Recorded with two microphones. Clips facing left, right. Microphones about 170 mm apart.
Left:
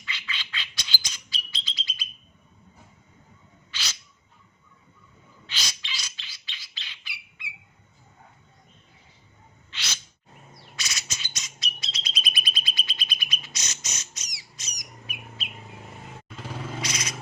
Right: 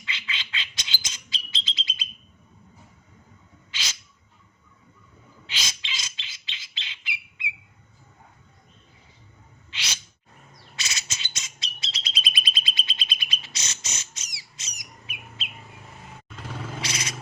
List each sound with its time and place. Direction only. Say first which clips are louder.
0.0 s bird: right 1 dB; 25° right (ahead or behind)
3.7 s owl: right 1 dB; 20° right (ahead or behind)
5.5 s bird: right 1 dB; 20° right (ahead or behind)
9.7 s gasp: right 1 dB; 15° right (ahead or behind)
10.8 s bird: right 1 dB; 25° right (ahead or behind)
16.8 s a sound: even; 30° right (ahead or behind)